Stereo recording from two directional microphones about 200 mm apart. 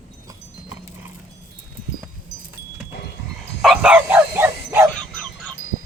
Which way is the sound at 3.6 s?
5° right (ahead or behind).